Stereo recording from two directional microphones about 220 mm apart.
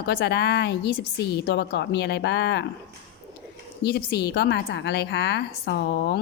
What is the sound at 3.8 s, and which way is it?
A woman's voice, 50° left (ahead or behind).